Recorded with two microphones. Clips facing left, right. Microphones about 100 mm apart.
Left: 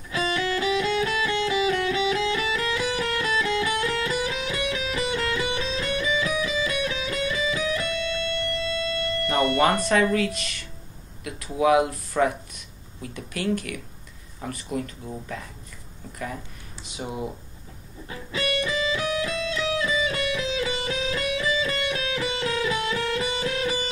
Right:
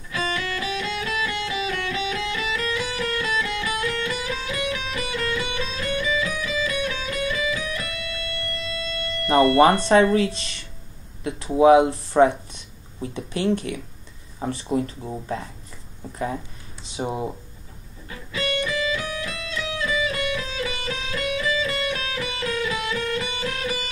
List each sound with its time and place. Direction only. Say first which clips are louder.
0.1 s music: left 2 dB; 30° left (ahead or behind)
9.6 s speech: right 4 dB; 30° right (ahead or behind)
16.8 s speech: right 4 dB; 30° right (ahead or behind)
18.0 s music: even; 30° left (ahead or behind)